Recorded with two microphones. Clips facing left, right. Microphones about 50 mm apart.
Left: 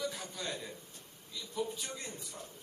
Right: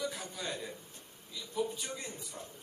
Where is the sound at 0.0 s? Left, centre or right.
Centre.